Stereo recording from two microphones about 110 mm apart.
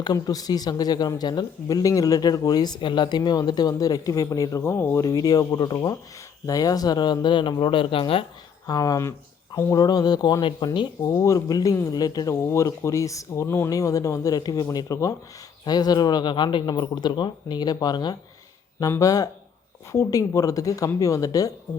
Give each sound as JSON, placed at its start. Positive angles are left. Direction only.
{"t": 0.0, "sound": "speech", "side_deg": 35}
{"t": 8.6, "sound": "speech", "side_deg": 35}